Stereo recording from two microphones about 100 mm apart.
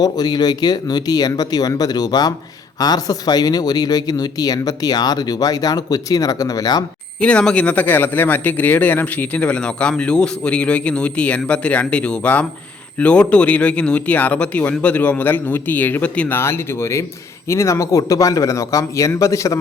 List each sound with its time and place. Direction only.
0.0 s speech: 40° left (ahead or behind)
7.2 s speech: 10° left (ahead or behind)
16.4 s speech: 25° left (ahead or behind)